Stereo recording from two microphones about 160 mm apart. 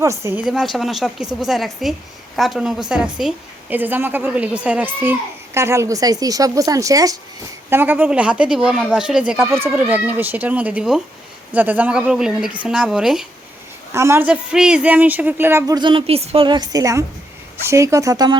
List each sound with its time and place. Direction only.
0.0 s a woman's voice: 20° right (ahead or behind)
0.4 s a woman's voice: centre (ahead or behind)
13.9 s a woman's voice: 15° right (ahead or behind)